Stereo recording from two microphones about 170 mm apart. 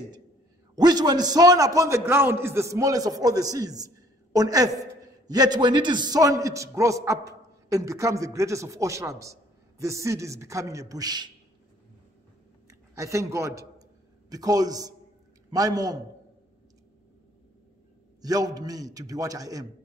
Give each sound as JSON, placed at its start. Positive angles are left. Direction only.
{"t": 0.7, "sound": "a man's voice", "side_deg": -25}
{"t": 12.6, "sound": "a sound", "side_deg": -20}
{"t": 14.3, "sound": "a man's voice", "side_deg": -20}
{"t": 18.2, "sound": "a man's voice", "side_deg": -20}